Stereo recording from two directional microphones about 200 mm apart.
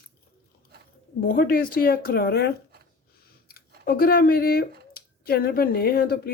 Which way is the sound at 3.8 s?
50° left (ahead or behind).